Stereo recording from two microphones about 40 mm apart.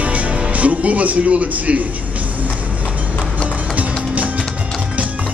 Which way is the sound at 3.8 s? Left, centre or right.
Right.